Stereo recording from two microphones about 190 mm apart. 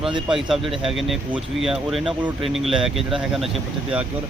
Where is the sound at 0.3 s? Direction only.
Centre (ahead or behind).